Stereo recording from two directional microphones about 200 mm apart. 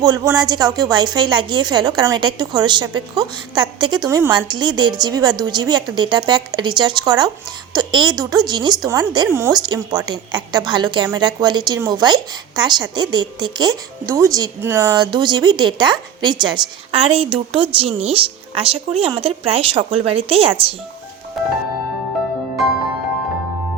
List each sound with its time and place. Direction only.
0.0 s a woman's voice: 20° right (ahead or behind)
14.9 s a woman's voice: 20° right (ahead or behind)
21.4 s music: centre (ahead or behind)